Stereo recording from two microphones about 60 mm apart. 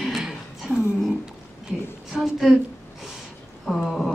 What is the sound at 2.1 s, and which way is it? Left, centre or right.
Speech, centre.